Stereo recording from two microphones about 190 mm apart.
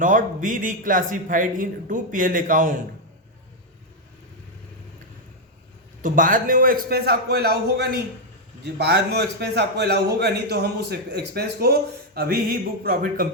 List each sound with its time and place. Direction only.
0.0 s a man's voice: 45° right (ahead or behind)
6.0 s a man's voice: 45° right (ahead or behind)